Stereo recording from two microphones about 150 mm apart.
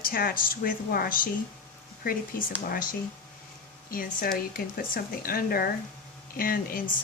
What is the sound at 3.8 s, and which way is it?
Speech, 70° left (ahead or behind).